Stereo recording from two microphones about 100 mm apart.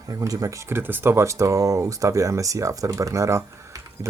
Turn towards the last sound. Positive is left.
turn(degrees=-30)  # may be behind; listen again after turning